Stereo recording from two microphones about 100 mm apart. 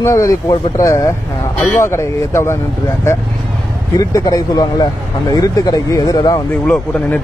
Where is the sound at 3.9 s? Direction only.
40° left (ahead or behind).